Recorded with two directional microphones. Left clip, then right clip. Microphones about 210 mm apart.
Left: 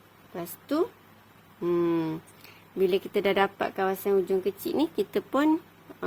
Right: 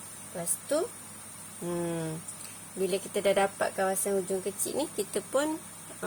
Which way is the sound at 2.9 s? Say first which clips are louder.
Even; 45° left (ahead or behind).